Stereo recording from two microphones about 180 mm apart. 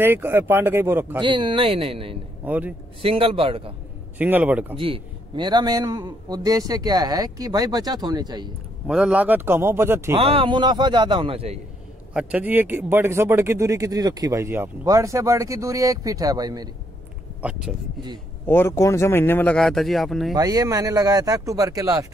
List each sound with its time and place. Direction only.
0.0 s speech: 15° right (ahead or behind)
1.2 s a man's voice: 25° right (ahead or behind)
2.4 s speech: 10° right (ahead or behind)
3.0 s a man's voice: 30° right (ahead or behind)
4.2 s speech: 10° right (ahead or behind)
4.7 s a man's voice: 30° right (ahead or behind)
8.8 s speech: 5° right (ahead or behind)
10.1 s a man's voice: 30° right (ahead or behind)
12.1 s speech: 5° right (ahead or behind)
17.4 s speech: 5° right (ahead or behind)
18.5 s speech: 15° left (ahead or behind)
20.3 s a man's voice: 20° right (ahead or behind)